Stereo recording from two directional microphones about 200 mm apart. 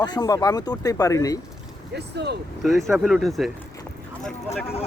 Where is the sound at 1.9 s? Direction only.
55° right (ahead or behind).